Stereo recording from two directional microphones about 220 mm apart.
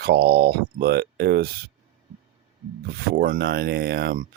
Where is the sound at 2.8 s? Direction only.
45° right (ahead or behind).